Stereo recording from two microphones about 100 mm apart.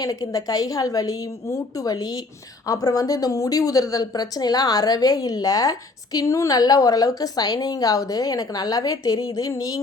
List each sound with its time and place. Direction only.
0.0 s a woman's voice: 40° left (ahead or behind)